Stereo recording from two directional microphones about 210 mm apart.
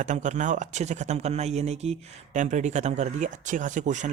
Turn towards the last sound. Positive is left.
turn(degrees=-35)  # may be behind; listen again after turning